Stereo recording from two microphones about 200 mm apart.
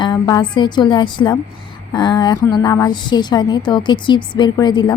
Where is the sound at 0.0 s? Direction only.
20° left (ahead or behind).